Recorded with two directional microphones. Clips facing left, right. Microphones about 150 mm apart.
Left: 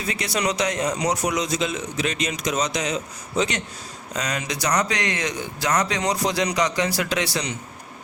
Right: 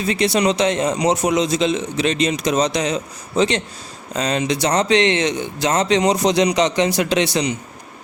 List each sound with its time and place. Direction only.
0.0 s a man's voice: 25° right (ahead or behind)